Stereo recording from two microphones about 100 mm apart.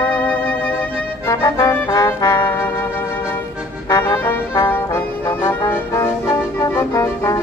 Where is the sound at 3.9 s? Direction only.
45° left (ahead or behind).